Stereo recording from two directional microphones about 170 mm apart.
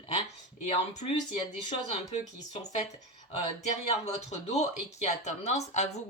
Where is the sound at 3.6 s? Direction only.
40° left (ahead or behind).